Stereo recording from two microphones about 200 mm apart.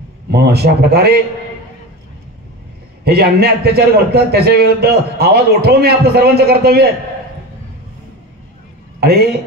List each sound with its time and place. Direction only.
0.3 s a man's voice: 55° right (ahead or behind)
3.0 s a man's voice: 50° right (ahead or behind)
9.0 s a man's voice: 50° right (ahead or behind)